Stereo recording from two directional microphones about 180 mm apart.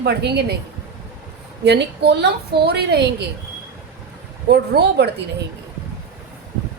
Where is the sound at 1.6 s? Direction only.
70° right (ahead or behind).